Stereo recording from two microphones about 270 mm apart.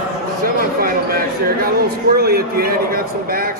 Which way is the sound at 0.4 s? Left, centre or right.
Right.